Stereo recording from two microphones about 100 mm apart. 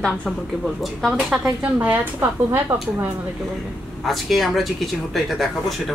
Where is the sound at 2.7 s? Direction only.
55° right (ahead or behind).